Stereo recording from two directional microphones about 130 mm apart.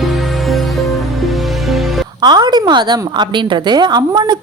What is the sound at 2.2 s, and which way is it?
A woman's voice, 35° right (ahead or behind).